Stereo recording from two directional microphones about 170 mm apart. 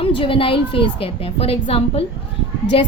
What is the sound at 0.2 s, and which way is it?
Speech, 30° left (ahead or behind).